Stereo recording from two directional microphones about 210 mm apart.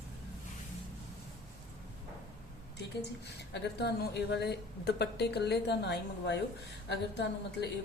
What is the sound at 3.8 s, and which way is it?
A woman's voice, 50° left (ahead or behind).